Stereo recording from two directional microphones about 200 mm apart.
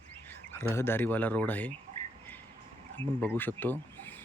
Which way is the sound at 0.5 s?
10° left (ahead or behind).